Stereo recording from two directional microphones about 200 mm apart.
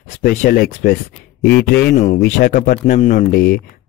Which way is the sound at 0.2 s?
50° left (ahead or behind).